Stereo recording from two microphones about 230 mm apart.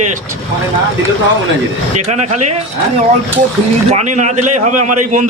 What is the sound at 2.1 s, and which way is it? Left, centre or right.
Speech, right.